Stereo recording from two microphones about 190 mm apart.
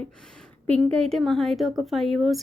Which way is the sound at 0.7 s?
5° left (ahead or behind).